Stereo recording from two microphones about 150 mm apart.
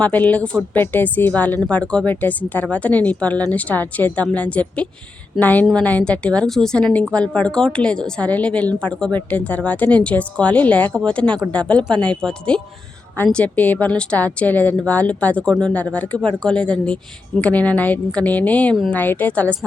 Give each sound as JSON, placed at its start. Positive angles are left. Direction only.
{"t": 0.0, "sound": "a woman's voice", "side_deg": 10}